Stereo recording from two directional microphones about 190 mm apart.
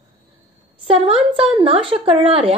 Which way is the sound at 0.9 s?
30° right (ahead or behind).